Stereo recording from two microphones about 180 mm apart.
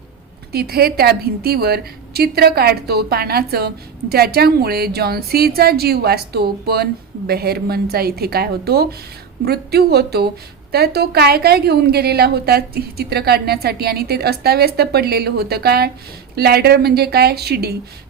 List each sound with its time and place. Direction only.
0.5 s a woman's voice: 60° right (ahead or behind)